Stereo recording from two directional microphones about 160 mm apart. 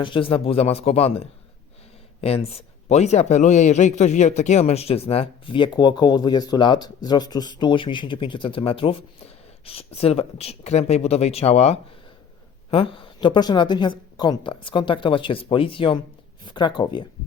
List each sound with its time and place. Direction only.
0.0 s speech: 30° left (ahead or behind)